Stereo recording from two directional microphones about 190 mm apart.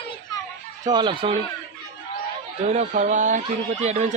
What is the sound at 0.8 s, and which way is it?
Speech, 20° right (ahead or behind).